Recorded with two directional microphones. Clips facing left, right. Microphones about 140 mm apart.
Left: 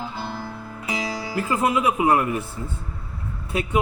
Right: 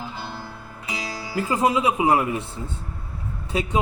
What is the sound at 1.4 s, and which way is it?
A man's voice, 20° right (ahead or behind).